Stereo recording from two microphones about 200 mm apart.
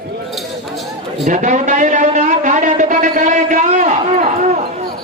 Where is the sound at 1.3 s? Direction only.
40° right (ahead or behind).